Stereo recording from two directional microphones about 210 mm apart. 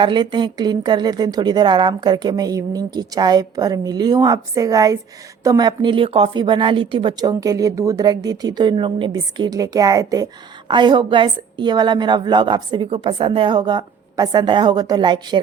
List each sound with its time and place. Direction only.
0.0 s speech: 20° right (ahead or behind)